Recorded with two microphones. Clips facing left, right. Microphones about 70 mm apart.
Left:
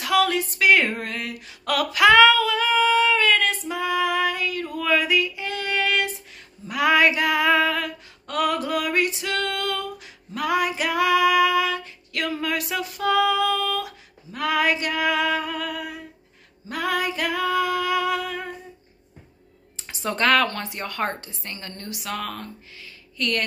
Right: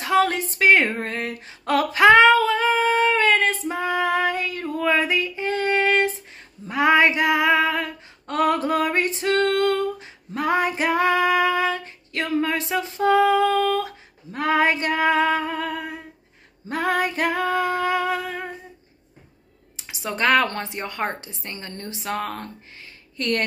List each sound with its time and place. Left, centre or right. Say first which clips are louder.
0.0 s speech: right 1 dB; right
1.6 s female singing: right 2 dB; right
19.8 s a sound: left 1 dB; centre
20.4 s a woman's voice: right 1 dB; right